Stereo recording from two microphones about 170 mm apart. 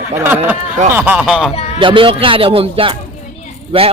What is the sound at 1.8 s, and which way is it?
Speech, 30° right (ahead or behind).